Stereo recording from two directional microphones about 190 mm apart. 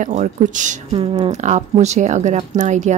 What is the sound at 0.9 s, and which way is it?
Speech, 30° right (ahead or behind).